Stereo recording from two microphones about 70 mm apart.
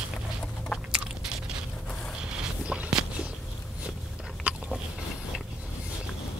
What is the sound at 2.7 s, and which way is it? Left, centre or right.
Walk, centre.